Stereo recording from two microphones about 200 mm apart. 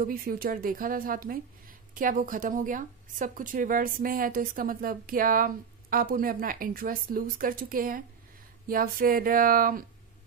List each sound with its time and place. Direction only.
0.0 s a woman's voice: 45° right (ahead or behind)